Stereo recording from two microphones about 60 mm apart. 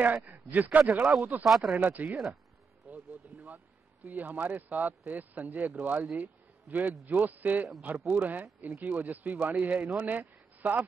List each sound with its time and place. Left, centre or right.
0.0 s speech: right
1.4 s speech: centre
1.7 s speech: right